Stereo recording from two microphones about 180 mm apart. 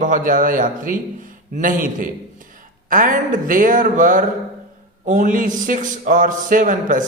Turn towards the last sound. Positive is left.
turn(degrees=-45)  # may be behind; listen again after turning